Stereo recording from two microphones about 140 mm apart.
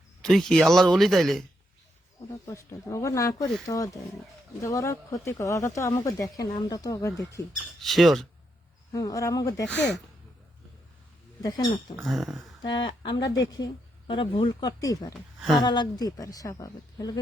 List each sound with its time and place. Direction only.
0.2 s speech: 5° left (ahead or behind)
2.3 s speech: 20° left (ahead or behind)
7.8 s speech: centre (ahead or behind)
8.9 s speech: 25° left (ahead or behind)
9.6 s speech: 5° left (ahead or behind)
12.0 s speech: centre (ahead or behind)
12.6 s speech: 35° left (ahead or behind)
14.1 s speech: 40° left (ahead or behind)
15.4 s speech: centre (ahead or behind)
15.6 s speech: 35° left (ahead or behind)